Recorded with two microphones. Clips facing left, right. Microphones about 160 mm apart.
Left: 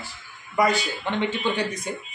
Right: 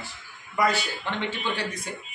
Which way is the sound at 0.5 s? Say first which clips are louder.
Left 3 dB; 15° left (ahead or behind).